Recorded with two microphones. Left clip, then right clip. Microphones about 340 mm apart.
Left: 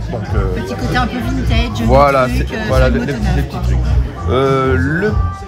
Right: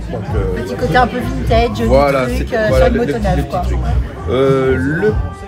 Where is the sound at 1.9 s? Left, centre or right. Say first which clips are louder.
Left 5 dB; centre.